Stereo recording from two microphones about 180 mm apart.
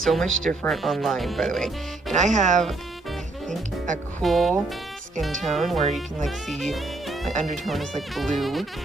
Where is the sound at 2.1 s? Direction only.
40° right (ahead or behind).